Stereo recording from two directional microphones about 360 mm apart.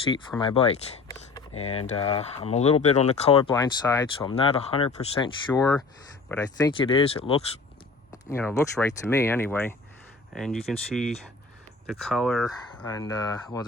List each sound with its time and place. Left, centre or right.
0.1 s speech: centre
1.3 s a sound: centre
1.9 s speech: centre
6.7 s speech: centre